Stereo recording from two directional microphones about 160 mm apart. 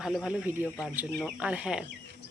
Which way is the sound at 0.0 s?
Centre (ahead or behind).